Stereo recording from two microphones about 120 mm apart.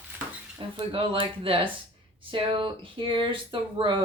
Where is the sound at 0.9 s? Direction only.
45° right (ahead or behind).